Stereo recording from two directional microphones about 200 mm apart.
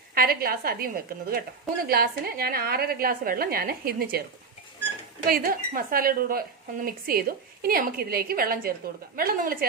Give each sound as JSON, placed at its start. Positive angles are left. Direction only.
{"t": 0.1, "sound": "speech", "side_deg": -45}
{"t": 5.2, "sound": "speech", "side_deg": -45}